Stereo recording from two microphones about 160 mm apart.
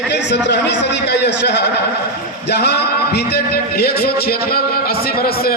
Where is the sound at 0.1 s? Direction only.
90° left.